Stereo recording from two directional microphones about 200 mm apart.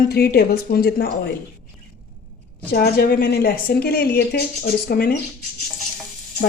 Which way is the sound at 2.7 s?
50° left (ahead or behind).